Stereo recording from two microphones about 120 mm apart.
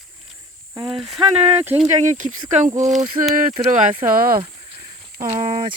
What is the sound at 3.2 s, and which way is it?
Speech, 40° right (ahead or behind).